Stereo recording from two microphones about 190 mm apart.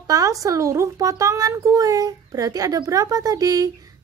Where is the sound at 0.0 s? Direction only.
20° right (ahead or behind).